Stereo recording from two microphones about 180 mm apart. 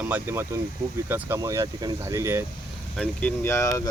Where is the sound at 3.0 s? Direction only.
5° left (ahead or behind).